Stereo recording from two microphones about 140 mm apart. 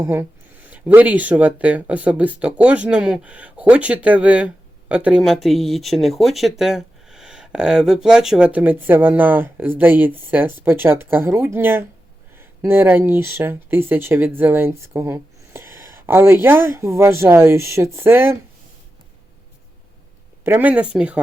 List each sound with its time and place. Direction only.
0.0 s speech: 15° right (ahead or behind)
20.4 s speech: 15° right (ahead or behind)